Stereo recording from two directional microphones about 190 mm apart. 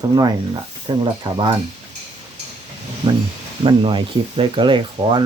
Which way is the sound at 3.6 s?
25° right (ahead or behind).